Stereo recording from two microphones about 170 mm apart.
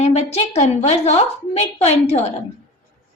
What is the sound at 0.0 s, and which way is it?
A woman's voice, 40° left (ahead or behind).